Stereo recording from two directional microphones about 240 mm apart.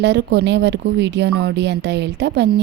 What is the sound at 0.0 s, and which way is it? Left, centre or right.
A woman's voice, right.